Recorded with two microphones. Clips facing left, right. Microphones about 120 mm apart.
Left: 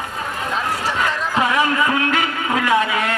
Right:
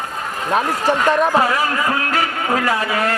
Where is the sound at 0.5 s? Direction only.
55° right (ahead or behind).